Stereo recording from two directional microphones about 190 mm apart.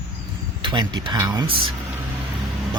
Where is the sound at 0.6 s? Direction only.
25° right (ahead or behind).